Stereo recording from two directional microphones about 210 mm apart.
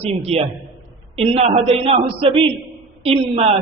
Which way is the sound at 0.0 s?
30° right (ahead or behind).